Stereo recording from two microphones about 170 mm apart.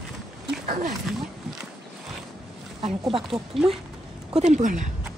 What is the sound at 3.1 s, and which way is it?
Speech, centre (ahead or behind).